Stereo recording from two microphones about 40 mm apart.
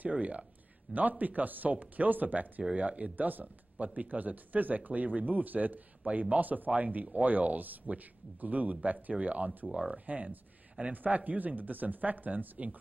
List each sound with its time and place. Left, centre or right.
0.1 s speech: right
9.7 s speech: right
10.0 s speech: right